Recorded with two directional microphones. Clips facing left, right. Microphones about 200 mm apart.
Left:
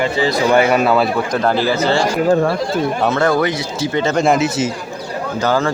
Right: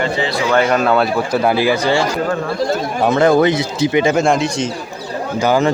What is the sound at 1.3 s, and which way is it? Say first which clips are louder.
A man's voice: right 2 dB; 10° right (ahead or behind).